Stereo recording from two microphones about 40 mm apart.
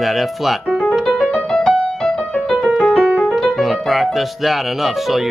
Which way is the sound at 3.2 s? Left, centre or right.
Centre.